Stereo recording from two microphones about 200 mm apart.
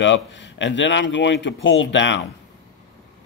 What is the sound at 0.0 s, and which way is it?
Speech, 65° left (ahead or behind).